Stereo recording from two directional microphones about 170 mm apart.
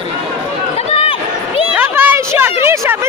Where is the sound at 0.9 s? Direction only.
35° left (ahead or behind).